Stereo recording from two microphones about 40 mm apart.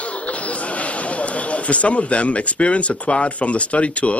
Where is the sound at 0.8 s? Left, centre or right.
Left.